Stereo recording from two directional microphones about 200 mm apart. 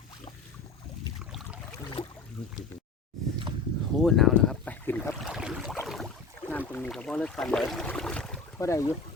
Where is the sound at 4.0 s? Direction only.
Centre (ahead or behind).